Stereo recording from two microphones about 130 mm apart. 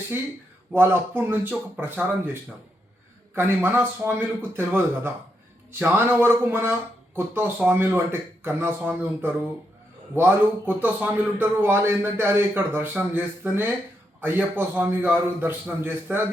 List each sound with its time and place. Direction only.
0.7 s a man's voice: 15° right (ahead or behind)